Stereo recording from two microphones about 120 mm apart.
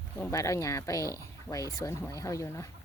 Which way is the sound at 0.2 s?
25° left (ahead or behind).